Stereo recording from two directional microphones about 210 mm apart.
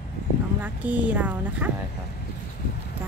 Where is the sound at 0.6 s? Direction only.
5° right (ahead or behind).